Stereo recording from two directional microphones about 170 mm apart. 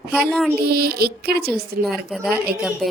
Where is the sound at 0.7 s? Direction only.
70° right (ahead or behind).